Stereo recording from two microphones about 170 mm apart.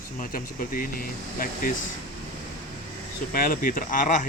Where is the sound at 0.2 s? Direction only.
55° left (ahead or behind).